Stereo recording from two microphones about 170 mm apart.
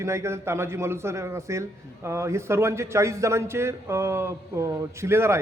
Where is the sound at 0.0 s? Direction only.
15° right (ahead or behind).